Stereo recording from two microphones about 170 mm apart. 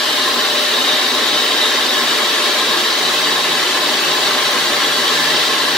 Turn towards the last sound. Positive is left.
turn(degrees=0)  # may be behind; listen again after turning